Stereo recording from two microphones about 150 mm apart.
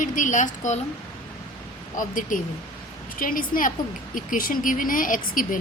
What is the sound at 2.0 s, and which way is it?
A woman's voice, 65° left (ahead or behind).